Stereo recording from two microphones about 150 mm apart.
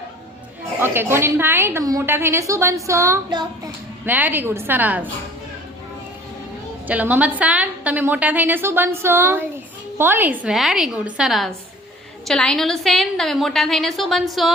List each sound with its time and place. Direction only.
0.8 s a woman's voice: 15° right (ahead or behind)
4.0 s a woman's voice: 10° right (ahead or behind)
6.8 s a woman's voice: 10° right (ahead or behind)